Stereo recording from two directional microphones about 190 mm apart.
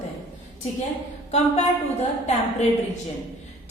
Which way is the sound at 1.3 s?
35° left (ahead or behind).